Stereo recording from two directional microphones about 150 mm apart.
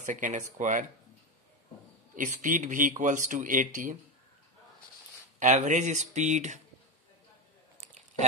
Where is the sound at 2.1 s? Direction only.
60° right (ahead or behind).